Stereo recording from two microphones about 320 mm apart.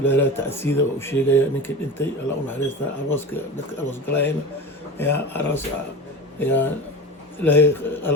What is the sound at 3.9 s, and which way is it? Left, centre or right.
Speech, centre.